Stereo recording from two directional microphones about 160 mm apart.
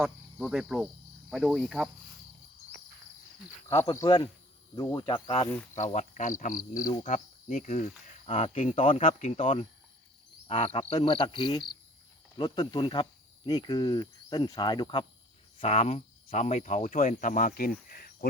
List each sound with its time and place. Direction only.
0.0 s speech: centre (ahead or behind)
3.7 s speech: 20° left (ahead or behind)
5.0 s insect: 35° left (ahead or behind)
5.7 s speech: 50° left (ahead or behind)
10.4 s insect: 35° left (ahead or behind)
12.4 s speech: 30° left (ahead or behind)
15.5 s speech: 40° left (ahead or behind); by 18.3 s 65° left (ahead or behind)